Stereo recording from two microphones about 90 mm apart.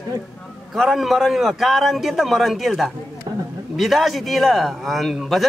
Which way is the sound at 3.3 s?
70° right (ahead or behind).